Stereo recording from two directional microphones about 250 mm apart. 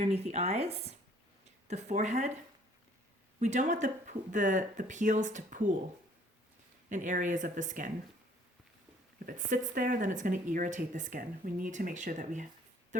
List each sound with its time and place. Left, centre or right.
0.0 s speech: right
3.4 s speech: right
6.9 s speech: right
9.1 s speech: right